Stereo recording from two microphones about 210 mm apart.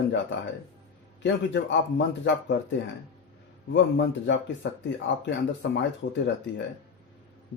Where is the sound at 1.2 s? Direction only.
55° left (ahead or behind).